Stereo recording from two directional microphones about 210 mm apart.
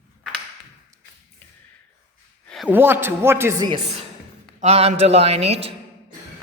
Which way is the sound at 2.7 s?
10° right (ahead or behind).